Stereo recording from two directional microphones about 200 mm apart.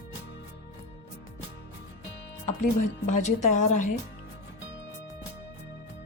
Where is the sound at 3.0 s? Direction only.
35° left (ahead or behind).